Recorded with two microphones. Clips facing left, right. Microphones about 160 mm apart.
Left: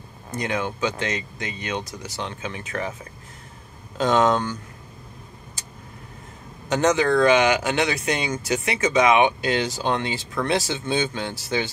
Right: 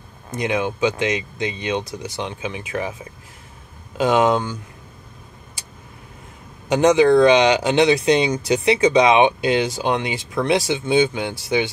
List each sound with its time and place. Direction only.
0.4 s speech: 20° right (ahead or behind)
6.7 s speech: 15° right (ahead or behind)